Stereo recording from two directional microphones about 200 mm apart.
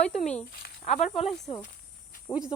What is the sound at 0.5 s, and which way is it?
Speech, 55° left (ahead or behind).